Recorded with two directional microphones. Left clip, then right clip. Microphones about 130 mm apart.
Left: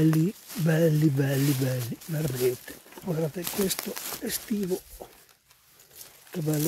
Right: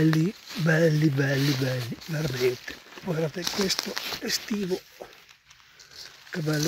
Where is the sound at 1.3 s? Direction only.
20° left (ahead or behind).